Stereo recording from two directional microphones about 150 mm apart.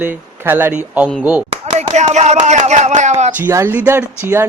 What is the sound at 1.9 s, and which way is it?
Speech, 50° right (ahead or behind).